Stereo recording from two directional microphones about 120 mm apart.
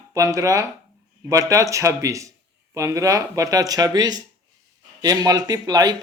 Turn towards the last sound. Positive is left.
turn(degrees=-30)  # may be behind; listen again after turning